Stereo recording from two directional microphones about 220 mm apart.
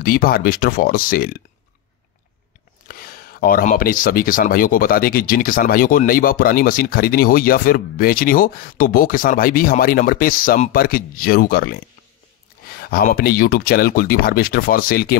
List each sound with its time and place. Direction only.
0.0 s speech: 40° left (ahead or behind)
2.9 s speech: 40° left (ahead or behind)